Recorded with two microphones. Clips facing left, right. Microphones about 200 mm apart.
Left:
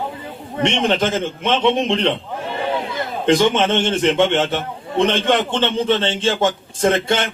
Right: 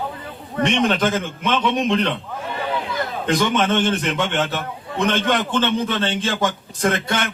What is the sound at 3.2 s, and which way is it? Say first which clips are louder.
A man's voice: left 5 dB; 25° left (ahead or behind).